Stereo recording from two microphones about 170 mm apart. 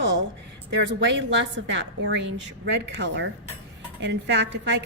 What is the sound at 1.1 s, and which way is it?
A woman's voice, 90° right.